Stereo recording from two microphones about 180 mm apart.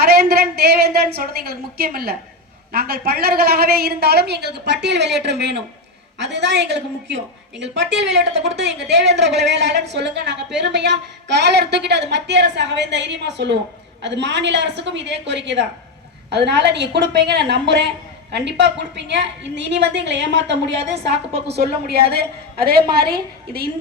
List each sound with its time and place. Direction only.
0.0 s a woman's voice: 60° right (ahead or behind)